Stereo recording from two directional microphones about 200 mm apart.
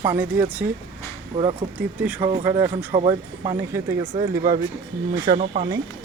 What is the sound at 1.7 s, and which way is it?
Speech, 5° right (ahead or behind).